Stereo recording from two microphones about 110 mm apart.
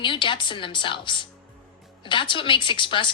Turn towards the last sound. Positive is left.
turn(degrees=45)  # may be behind; listen again after turning